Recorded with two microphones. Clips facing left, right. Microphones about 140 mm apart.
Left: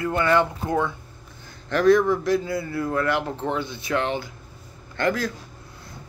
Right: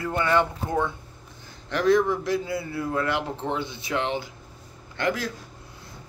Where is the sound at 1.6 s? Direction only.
20° right (ahead or behind).